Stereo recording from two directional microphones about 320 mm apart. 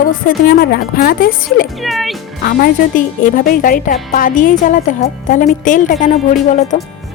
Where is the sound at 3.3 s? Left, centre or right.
Left.